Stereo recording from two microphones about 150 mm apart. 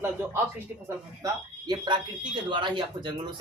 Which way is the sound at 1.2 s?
25° right (ahead or behind).